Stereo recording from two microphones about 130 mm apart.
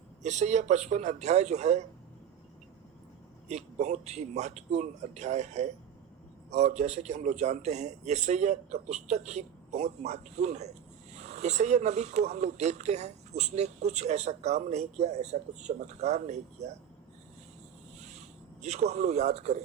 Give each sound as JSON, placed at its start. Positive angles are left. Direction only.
{"t": 0.2, "sound": "speech", "side_deg": -65}
{"t": 3.5, "sound": "speech", "side_deg": -60}
{"t": 18.6, "sound": "speech", "side_deg": -60}